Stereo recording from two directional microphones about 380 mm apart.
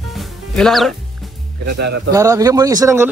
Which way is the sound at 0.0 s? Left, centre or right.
Centre.